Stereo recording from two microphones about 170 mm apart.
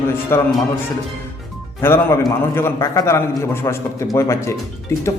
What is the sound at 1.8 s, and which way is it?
Speech, 15° left (ahead or behind).